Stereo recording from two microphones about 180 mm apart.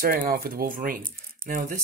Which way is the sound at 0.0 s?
55° right (ahead or behind).